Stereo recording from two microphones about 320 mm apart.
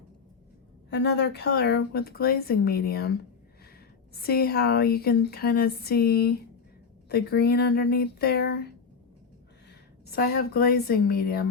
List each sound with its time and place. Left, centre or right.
0.9 s speech: left
9.6 s a woman's voice: left